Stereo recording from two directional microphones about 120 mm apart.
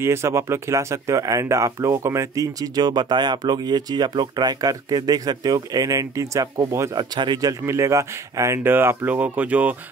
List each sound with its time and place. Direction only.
0.0 s speech: 20° right (ahead or behind)